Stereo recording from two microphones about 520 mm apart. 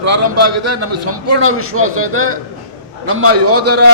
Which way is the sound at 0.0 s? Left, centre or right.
Right.